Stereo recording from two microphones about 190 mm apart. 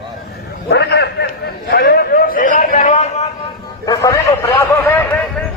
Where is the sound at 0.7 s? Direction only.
60° left (ahead or behind); by 3.3 s 35° left (ahead or behind).